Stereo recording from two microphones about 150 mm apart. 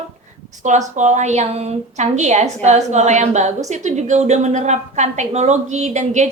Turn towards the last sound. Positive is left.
turn(degrees=-50)  # may be behind; listen again after turning